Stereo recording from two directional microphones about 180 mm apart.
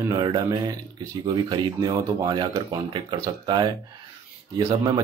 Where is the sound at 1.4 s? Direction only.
25° right (ahead or behind).